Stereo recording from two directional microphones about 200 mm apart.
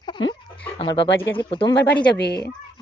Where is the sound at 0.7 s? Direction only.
25° left (ahead or behind).